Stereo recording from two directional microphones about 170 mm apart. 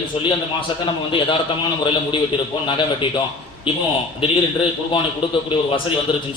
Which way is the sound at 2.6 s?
30° left (ahead or behind).